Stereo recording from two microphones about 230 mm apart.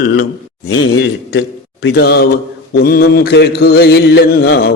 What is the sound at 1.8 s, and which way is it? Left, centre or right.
Mantra, left.